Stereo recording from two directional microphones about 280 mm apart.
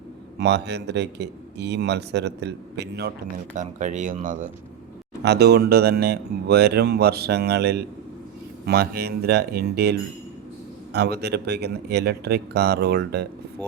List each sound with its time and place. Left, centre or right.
0.3 s speech: right
3.5 s speech: right